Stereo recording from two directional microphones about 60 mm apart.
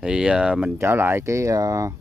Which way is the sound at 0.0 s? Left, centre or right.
Centre.